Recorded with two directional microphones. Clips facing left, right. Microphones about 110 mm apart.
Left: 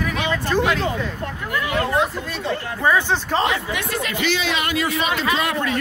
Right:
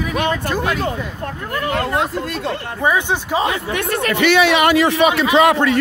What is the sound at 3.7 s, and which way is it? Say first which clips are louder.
Speech: right 5 dB; 55° right (ahead or behind).